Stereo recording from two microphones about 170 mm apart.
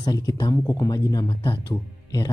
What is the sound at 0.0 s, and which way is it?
Speech, 20° left (ahead or behind).